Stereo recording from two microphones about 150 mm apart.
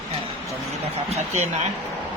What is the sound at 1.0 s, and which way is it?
Speech, 45° right (ahead or behind).